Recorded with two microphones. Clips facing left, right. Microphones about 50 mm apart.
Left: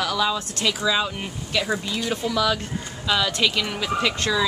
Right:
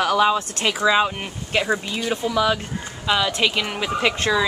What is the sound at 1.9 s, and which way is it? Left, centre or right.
Speech, centre.